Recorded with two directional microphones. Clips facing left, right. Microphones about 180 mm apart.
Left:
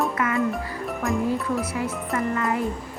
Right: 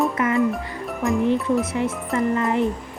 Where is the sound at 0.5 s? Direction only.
Centre (ahead or behind).